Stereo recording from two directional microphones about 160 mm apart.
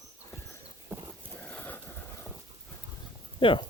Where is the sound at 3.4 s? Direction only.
35° left (ahead or behind).